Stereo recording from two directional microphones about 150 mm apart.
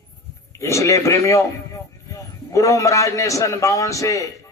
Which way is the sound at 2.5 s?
20° left (ahead or behind).